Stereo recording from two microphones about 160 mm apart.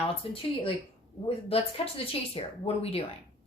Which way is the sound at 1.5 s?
35° left (ahead or behind).